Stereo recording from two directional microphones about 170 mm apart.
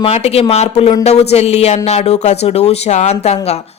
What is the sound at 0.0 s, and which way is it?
A woman's voice, 35° left (ahead or behind).